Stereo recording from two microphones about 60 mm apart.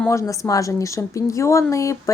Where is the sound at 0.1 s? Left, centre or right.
Left.